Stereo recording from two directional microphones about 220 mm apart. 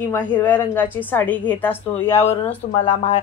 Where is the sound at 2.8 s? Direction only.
25° left (ahead or behind).